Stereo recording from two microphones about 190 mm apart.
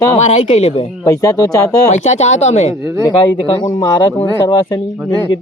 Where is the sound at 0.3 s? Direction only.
35° left (ahead or behind).